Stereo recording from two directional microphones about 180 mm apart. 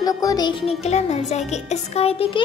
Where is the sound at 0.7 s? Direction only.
40° left (ahead or behind).